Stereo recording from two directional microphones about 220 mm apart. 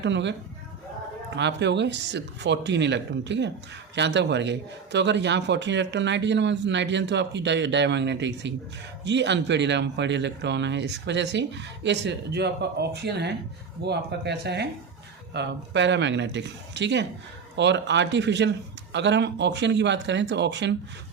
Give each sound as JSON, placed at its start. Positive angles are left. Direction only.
{"t": 0.0, "sound": "a man's voice", "side_deg": -55}
{"t": 1.4, "sound": "a man's voice", "side_deg": -55}